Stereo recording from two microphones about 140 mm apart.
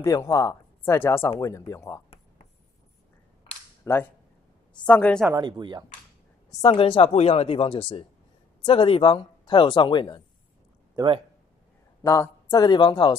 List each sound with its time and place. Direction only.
0.0 s speech: 25° left (ahead or behind)
3.8 s a woman's voice: 15° left (ahead or behind)
5.3 s speech: 30° right (ahead or behind)
6.6 s speech: 40° left (ahead or behind)
12.0 s speech: 25° left (ahead or behind)